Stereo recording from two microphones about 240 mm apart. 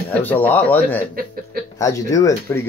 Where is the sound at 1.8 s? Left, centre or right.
Centre.